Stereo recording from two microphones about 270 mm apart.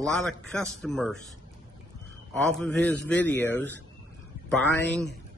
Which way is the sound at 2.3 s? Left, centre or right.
Centre.